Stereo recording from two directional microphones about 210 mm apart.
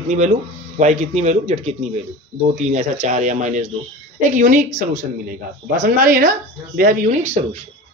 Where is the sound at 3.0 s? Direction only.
35° right (ahead or behind).